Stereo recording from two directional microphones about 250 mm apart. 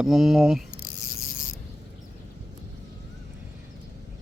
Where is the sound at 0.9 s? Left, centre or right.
Left.